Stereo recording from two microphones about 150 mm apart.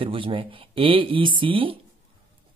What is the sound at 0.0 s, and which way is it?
Speech, 35° right (ahead or behind).